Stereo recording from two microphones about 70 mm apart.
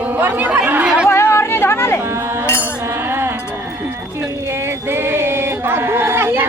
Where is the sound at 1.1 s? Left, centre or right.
Left.